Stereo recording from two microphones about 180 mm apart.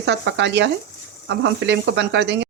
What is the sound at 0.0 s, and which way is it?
Speech, 80° right.